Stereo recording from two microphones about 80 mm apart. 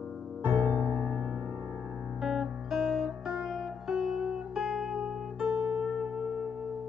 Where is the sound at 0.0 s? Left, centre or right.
Centre.